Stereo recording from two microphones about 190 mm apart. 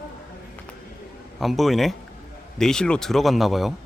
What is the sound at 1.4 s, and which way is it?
A man's voice, centre (ahead or behind).